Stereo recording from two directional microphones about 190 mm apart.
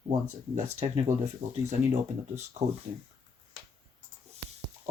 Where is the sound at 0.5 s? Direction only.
35° right (ahead or behind).